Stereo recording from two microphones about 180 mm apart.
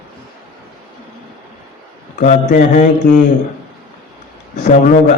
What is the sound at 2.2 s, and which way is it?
Mantra, 45° left (ahead or behind).